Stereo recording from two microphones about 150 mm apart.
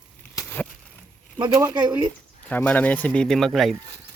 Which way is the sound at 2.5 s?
10° left (ahead or behind).